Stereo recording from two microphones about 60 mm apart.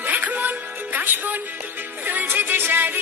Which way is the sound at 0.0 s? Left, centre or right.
Right.